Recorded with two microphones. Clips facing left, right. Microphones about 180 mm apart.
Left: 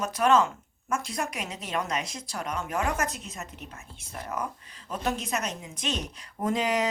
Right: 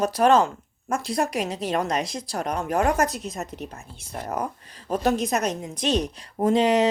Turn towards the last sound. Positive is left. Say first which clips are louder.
# right 7 dB
turn(degrees=-30)  # may be behind; listen again after turning